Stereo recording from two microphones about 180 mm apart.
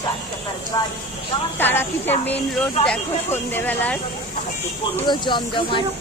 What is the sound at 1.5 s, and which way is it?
Speech, 10° left (ahead or behind).